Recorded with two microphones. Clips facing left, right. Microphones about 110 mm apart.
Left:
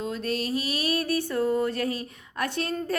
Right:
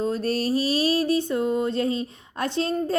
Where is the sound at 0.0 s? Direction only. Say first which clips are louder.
Right 5 dB; 35° right (ahead or behind).